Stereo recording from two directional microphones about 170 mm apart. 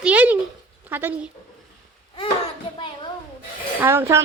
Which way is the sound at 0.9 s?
10° right (ahead or behind).